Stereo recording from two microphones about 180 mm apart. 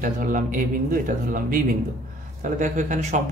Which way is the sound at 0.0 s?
45° right (ahead or behind).